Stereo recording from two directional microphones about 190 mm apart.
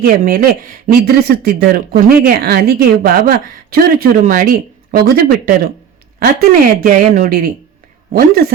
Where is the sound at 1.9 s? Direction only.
55° right (ahead or behind).